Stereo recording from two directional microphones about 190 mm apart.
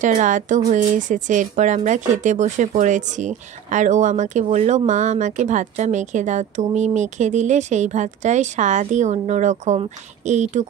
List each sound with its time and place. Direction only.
0.0 s speech: 40° right (ahead or behind)